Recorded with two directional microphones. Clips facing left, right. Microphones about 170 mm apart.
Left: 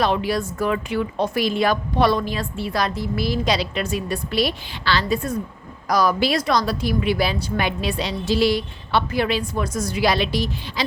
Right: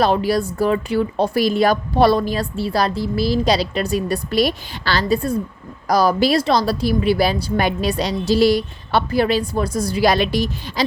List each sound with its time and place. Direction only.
0.0 s speech: 40° right (ahead or behind)